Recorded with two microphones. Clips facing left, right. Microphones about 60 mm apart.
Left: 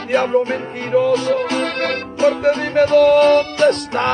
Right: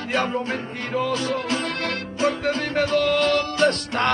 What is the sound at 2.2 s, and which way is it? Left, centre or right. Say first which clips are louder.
Music: left 8 dB; left.